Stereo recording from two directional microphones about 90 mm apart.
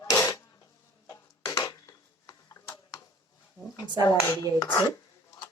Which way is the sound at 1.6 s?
45° left (ahead or behind).